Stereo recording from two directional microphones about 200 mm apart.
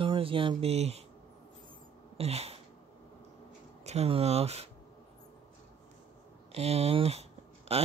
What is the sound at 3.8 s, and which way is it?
Speech, 30° right (ahead or behind).